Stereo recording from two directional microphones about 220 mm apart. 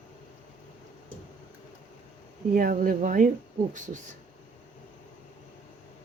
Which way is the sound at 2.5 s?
40° right (ahead or behind).